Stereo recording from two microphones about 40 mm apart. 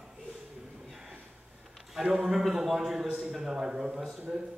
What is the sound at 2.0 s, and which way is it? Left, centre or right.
Speech, centre.